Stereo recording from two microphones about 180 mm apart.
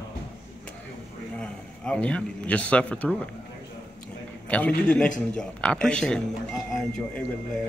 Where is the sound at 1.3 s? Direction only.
5° left (ahead or behind).